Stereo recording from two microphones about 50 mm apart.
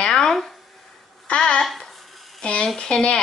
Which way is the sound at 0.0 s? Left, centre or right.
Centre.